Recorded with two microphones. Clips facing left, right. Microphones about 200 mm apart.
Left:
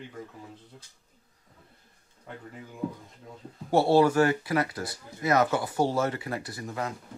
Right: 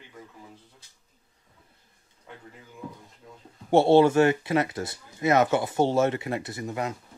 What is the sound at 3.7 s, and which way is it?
Speech, 25° right (ahead or behind).